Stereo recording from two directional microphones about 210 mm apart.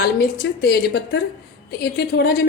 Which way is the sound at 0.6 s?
50° left (ahead or behind).